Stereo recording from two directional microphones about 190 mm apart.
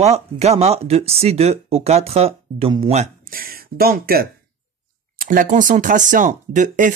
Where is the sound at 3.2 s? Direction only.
50° right (ahead or behind).